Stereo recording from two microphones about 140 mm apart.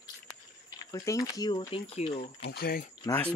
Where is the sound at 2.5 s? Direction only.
90° left.